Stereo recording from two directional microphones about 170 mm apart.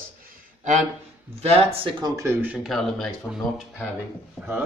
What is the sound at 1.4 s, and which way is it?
Speech, 35° right (ahead or behind).